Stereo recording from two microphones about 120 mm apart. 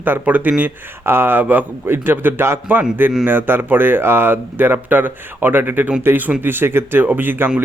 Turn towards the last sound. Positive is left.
turn(degrees=-15)  # may be behind; listen again after turning